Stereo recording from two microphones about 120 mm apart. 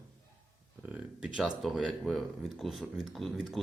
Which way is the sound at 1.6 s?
Centre (ahead or behind).